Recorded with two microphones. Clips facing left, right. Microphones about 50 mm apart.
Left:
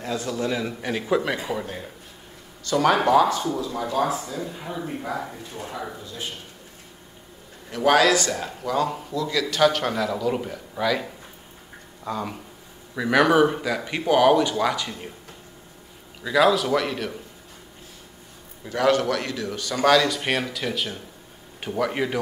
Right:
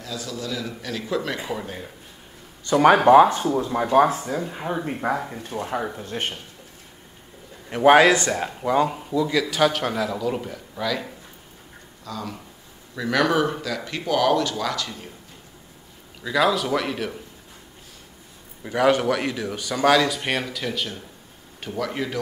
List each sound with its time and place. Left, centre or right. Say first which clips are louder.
0.0 s a man's voice: left 5 dB; left
1.3 s a man's voice: left 1 dB; centre
2.6 s speech: right 4 dB; right
5.9 s a man's voice: right 5 dB; right
7.7 s a man's voice: right 4 dB; right; by 11.1 s centre
12.0 s speech: left 4 dB; left
16.2 s a man's voice: left 2 dB; centre
18.6 s a man's voice: right 1 dB; centre